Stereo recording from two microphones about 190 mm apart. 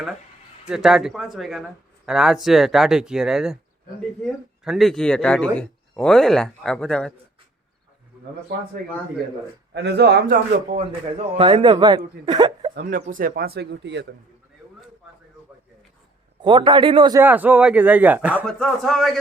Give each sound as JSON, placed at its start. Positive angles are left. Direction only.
{"t": 0.7, "sound": "speech", "side_deg": -5}
{"t": 9.7, "sound": "speech", "side_deg": -60}
{"t": 10.8, "sound": "speech", "side_deg": -30}
{"t": 12.7, "sound": "speech", "side_deg": -45}
{"t": 16.4, "sound": "speech", "side_deg": -25}
{"t": 17.2, "sound": "a man's voice", "side_deg": -10}
{"t": 18.4, "sound": "speech", "side_deg": 5}